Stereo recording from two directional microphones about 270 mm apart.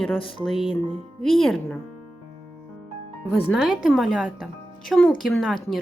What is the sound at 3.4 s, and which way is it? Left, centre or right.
Speech, centre.